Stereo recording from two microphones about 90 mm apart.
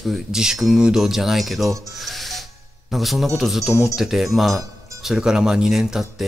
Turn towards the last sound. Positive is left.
turn(degrees=-5)  # may be behind; listen again after turning